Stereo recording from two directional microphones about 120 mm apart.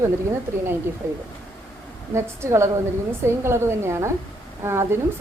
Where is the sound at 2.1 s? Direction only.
25° right (ahead or behind).